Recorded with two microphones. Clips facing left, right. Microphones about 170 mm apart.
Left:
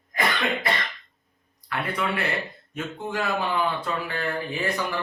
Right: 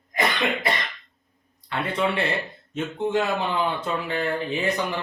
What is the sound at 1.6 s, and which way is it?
Speech, 25° right (ahead or behind).